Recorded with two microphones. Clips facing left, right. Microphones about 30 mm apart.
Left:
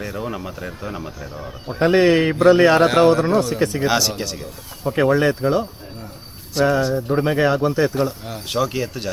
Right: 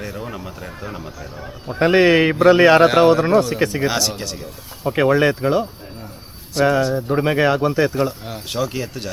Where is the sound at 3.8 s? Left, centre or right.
Centre.